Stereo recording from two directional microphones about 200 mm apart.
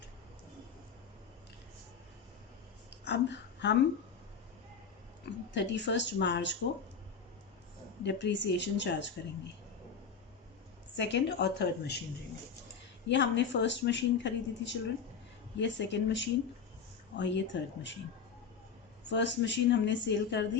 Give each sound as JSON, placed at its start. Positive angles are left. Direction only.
{"t": 3.1, "sound": "speech", "side_deg": 60}
{"t": 5.5, "sound": "a woman's voice", "side_deg": 60}
{"t": 8.0, "sound": "a woman's voice", "side_deg": 60}
{"t": 10.9, "sound": "a woman's voice", "side_deg": 60}
{"t": 13.1, "sound": "a woman's voice", "side_deg": 60}
{"t": 19.0, "sound": "a woman's voice", "side_deg": 60}